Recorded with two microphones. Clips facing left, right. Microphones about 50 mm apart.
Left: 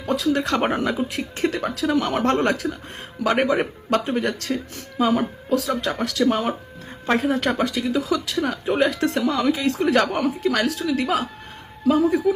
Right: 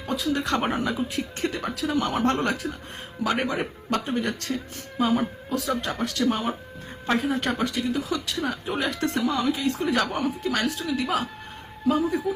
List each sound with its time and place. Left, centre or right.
0.0 s speech: left
8.4 s speech: left
10.5 s speech: left